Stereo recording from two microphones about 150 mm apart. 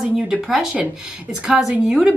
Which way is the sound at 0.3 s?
5° right (ahead or behind).